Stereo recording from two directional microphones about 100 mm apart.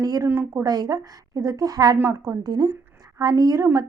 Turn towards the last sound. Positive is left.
turn(degrees=-30)  # may be behind; listen again after turning